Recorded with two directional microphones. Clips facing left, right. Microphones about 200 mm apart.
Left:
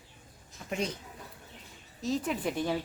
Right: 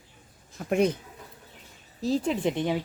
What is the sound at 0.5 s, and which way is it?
Speech, 55° right (ahead or behind).